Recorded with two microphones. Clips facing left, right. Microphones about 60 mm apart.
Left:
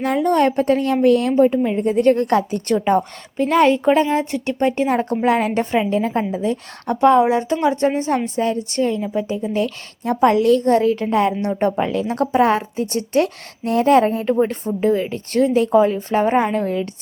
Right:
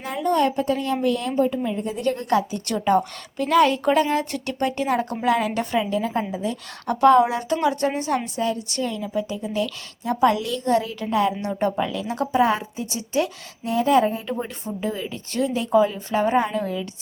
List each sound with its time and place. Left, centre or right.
0.0 s a woman's voice: left
2.7 s a woman's voice: left
6.9 s a woman's voice: left
14.4 s a woman's voice: left